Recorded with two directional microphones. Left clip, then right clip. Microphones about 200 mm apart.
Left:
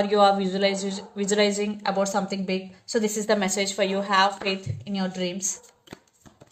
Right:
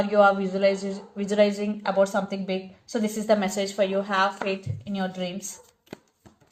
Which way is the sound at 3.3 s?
45° left (ahead or behind).